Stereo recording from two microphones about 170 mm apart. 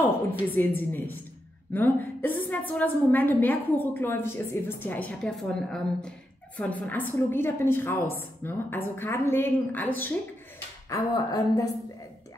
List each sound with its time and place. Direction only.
0.6 s a woman's voice: 10° left (ahead or behind)
10.9 s speech: 20° left (ahead or behind)